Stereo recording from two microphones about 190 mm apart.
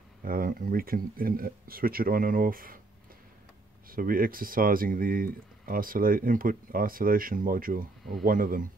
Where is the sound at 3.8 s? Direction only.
50° right (ahead or behind).